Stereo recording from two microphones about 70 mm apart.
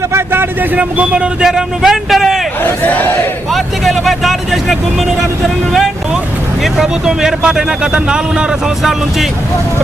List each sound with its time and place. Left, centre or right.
0.1 s a man's voice: right
0.8 s speech: centre
2.6 s speech: left
3.5 s speech: centre
6.6 s speech: centre